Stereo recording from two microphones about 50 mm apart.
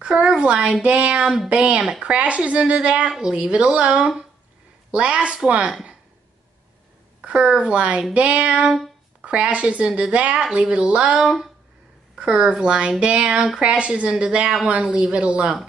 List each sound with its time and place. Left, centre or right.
0.1 s a woman's voice: centre
0.4 s a woman's voice: right
2.0 s a woman's voice: right
7.2 s a woman's voice: right
12.2 s a woman's voice: centre